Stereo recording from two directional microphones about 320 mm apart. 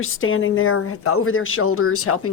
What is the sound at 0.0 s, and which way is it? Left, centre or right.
Speech, left.